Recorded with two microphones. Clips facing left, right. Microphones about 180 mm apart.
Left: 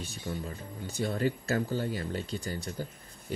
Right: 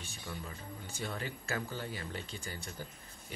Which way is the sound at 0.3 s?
40° left (ahead or behind).